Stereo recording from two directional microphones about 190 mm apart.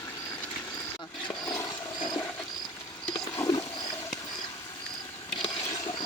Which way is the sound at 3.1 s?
20° left (ahead or behind).